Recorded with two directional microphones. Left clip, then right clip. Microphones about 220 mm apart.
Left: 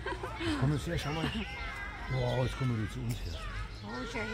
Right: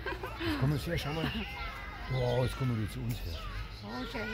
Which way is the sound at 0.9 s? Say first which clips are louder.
Even; 40° right (ahead or behind).